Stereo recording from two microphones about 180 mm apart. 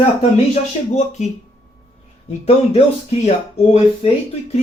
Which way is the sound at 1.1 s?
40° left (ahead or behind).